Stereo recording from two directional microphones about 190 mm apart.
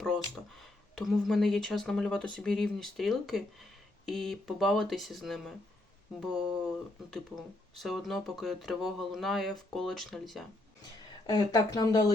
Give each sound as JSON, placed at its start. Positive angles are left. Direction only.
{"t": 0.0, "sound": "speech", "side_deg": 0}
{"t": 7.1, "sound": "speech", "side_deg": 0}
{"t": 11.3, "sound": "speech", "side_deg": 20}